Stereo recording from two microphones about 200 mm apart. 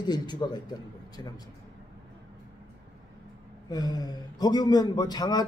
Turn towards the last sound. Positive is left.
turn(degrees=20)  # may be behind; listen again after turning